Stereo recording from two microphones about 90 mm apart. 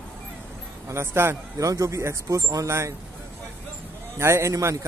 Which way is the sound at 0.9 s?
30° right (ahead or behind).